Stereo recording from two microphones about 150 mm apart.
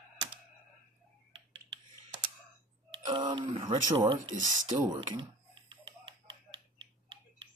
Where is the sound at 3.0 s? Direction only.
30° right (ahead or behind).